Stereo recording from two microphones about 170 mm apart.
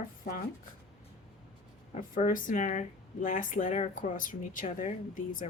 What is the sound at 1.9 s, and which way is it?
Speech, 45° left (ahead or behind).